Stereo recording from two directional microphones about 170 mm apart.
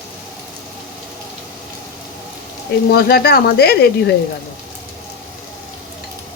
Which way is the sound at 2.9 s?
65° left (ahead or behind).